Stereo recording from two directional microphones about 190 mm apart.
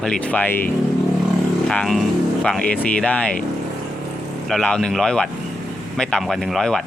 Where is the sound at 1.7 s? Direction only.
Centre (ahead or behind).